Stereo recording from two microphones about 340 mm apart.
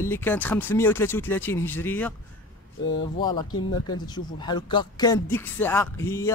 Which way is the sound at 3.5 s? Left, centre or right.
Left.